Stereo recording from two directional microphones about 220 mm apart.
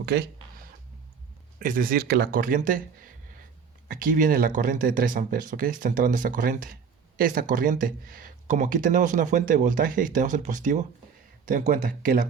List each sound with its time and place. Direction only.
0.0 s speech: 50° right (ahead or behind)
1.5 s speech: 40° right (ahead or behind)